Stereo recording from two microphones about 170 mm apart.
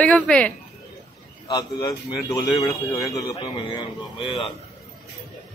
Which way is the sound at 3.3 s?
35° left (ahead or behind).